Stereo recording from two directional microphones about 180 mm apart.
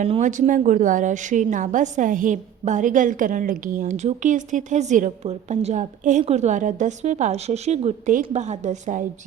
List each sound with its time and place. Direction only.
0.1 s a woman's voice: 45° right (ahead or behind)